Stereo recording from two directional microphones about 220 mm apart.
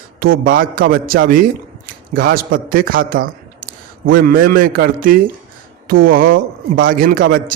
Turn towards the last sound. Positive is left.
turn(degrees=-40)  # may be behind; listen again after turning